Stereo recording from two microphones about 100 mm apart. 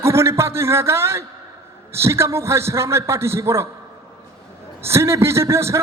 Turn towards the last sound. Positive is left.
turn(degrees=-25)  # may be behind; listen again after turning